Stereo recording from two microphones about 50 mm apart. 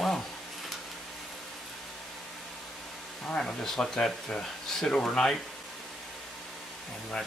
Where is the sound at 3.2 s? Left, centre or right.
Left.